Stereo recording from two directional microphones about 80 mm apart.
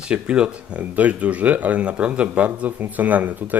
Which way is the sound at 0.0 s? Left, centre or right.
Centre.